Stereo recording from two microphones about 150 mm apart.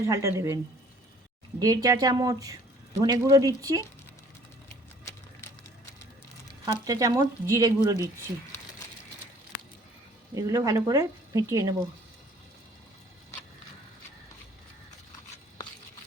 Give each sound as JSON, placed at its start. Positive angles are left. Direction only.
{"t": 0.1, "sound": "a woman's voice", "side_deg": -20}
{"t": 5.0, "sound": "a sound", "side_deg": 20}
{"t": 6.8, "sound": "a woman's voice", "side_deg": -25}
{"t": 10.3, "sound": "a woman's voice", "side_deg": -20}